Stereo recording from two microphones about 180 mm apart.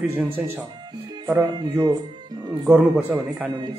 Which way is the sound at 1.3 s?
20° right (ahead or behind).